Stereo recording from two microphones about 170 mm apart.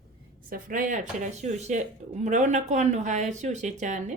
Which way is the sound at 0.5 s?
50° right (ahead or behind).